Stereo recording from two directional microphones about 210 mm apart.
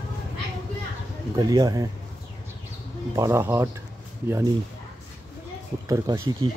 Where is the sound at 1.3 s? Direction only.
20° right (ahead or behind).